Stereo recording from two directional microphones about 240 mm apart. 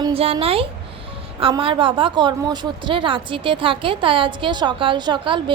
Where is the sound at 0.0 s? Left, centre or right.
Right.